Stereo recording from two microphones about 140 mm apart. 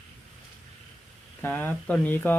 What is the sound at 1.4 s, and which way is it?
Speech, 15° left (ahead or behind).